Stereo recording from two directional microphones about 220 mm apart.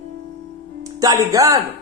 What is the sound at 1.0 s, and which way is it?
Speech, 15° right (ahead or behind).